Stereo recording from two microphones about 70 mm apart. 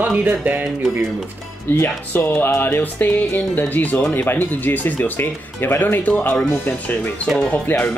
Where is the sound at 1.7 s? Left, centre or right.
Left.